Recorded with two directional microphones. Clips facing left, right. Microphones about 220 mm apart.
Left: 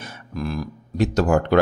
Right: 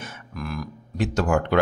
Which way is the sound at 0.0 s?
30° left (ahead or behind).